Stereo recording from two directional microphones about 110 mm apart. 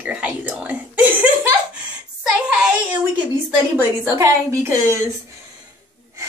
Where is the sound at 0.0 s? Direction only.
15° right (ahead or behind).